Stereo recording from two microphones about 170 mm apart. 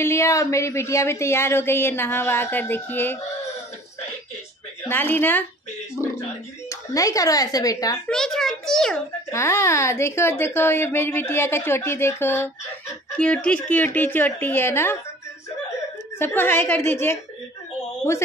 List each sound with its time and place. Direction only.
0.0 s a woman's voice: 15° left (ahead or behind)
4.8 s a woman's voice: 10° left (ahead or behind)
8.1 s a child's voice: 5° left (ahead or behind)
9.3 s a woman's voice: 15° left (ahead or behind)
16.2 s a woman's voice: 15° left (ahead or behind)